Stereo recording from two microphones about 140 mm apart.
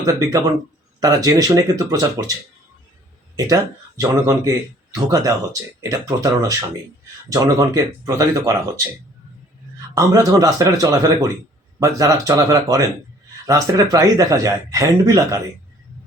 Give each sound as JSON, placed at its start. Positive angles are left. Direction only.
{"t": 0.0, "sound": "speech", "side_deg": -20}
{"t": 3.3, "sound": "speech", "side_deg": -25}
{"t": 9.9, "sound": "speech", "side_deg": -25}